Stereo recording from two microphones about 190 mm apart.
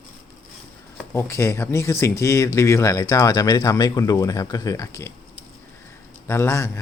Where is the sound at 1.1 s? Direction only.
15° left (ahead or behind).